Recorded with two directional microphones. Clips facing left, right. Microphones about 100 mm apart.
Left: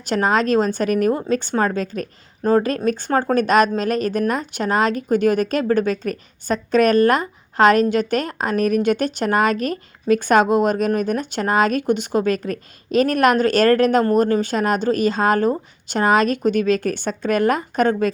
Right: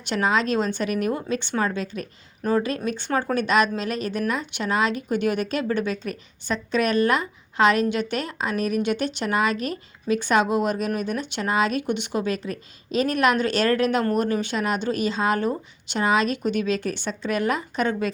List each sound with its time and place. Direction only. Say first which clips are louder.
0.0 s speech: left 4 dB; 40° left (ahead or behind)